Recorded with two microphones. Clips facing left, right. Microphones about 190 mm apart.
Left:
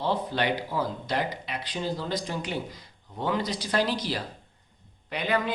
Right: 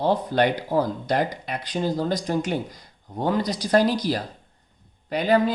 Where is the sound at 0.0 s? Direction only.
45° right (ahead or behind).